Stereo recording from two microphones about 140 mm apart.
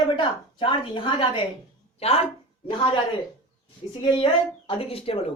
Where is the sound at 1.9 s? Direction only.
50° left (ahead or behind).